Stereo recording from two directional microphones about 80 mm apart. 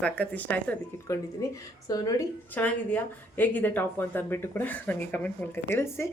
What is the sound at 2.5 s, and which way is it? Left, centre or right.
Speech, left.